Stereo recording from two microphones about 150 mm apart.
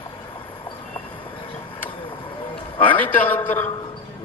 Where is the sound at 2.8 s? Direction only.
10° left (ahead or behind).